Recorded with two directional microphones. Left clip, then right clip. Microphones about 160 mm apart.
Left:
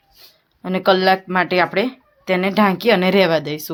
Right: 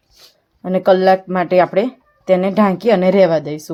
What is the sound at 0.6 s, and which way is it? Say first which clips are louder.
Speech: right 3 dB; 45° right (ahead or behind).